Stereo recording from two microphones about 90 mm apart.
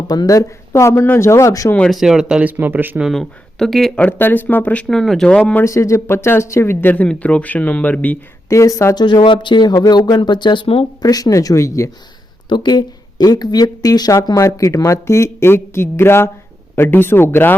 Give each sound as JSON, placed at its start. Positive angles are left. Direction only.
{"t": 0.1, "sound": "speech", "side_deg": 45}
{"t": 1.9, "sound": "speech", "side_deg": -5}
{"t": 3.0, "sound": "speech", "side_deg": 5}
{"t": 3.9, "sound": "speech", "side_deg": 20}
{"t": 5.6, "sound": "speech", "side_deg": 35}
{"t": 8.4, "sound": "speech", "side_deg": 35}
{"t": 9.0, "sound": "speech", "side_deg": 55}
{"t": 10.2, "sound": "speech", "side_deg": 60}
{"t": 11.0, "sound": "speech", "side_deg": 40}
{"t": 12.5, "sound": "speech", "side_deg": 55}